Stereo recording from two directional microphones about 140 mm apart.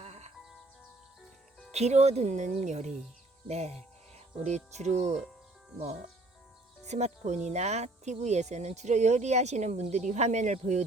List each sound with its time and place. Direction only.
0.0 s music: 55° right (ahead or behind)
1.7 s speech: 50° right (ahead or behind)
6.8 s speech: 55° right (ahead or behind)